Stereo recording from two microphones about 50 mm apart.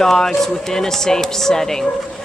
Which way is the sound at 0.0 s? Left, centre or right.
Centre.